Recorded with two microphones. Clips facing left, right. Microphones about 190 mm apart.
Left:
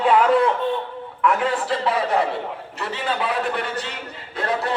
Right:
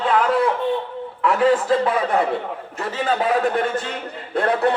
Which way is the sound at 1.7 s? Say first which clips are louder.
Right 3 dB; 50° right (ahead or behind).